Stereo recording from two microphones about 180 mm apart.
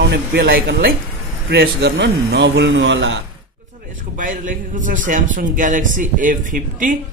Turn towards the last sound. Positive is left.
turn(degrees=-50)  # may be behind; listen again after turning